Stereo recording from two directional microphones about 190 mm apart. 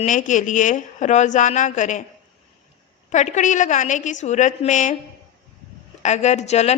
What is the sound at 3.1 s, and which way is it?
A woman's voice, 40° left (ahead or behind).